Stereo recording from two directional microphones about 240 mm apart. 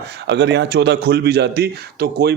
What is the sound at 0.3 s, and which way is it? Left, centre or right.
A man's voice, right.